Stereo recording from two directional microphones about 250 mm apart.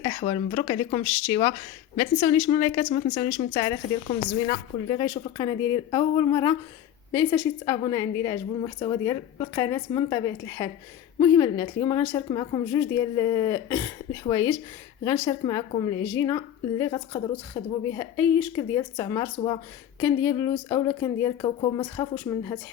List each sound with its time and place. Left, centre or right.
0.0 s a woman's voice: left